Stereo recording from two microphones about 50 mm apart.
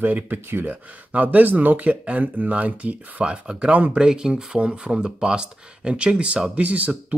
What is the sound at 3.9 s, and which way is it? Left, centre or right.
Speech, centre.